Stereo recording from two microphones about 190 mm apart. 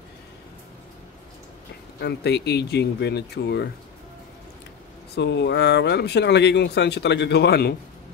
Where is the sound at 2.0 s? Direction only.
60° left (ahead or behind).